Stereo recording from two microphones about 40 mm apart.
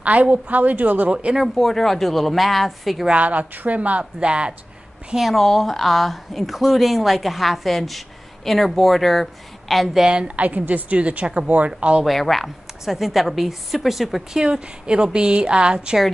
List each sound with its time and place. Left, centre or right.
0.0 s a woman's voice: right
1.5 s a woman's voice: centre
3.1 s a woman's voice: right
4.0 s speech: right
5.3 s a woman's voice: centre
10.2 s a woman's voice: right
12.1 s a woman's voice: centre
14.3 s speech: right